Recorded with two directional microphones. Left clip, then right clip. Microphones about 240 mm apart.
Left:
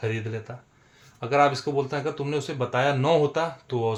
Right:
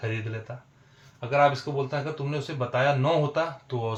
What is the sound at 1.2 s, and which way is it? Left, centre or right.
Speech, left.